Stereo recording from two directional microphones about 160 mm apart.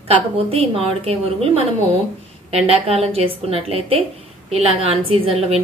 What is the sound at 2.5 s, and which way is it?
A woman's voice, 40° right (ahead or behind).